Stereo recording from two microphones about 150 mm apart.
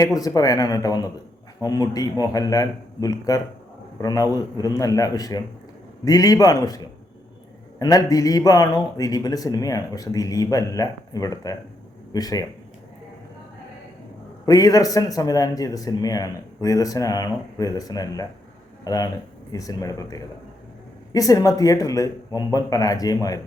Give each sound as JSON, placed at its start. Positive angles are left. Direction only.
{"t": 0.0, "sound": "a man's voice", "side_deg": 25}
{"t": 14.4, "sound": "a man's voice", "side_deg": 25}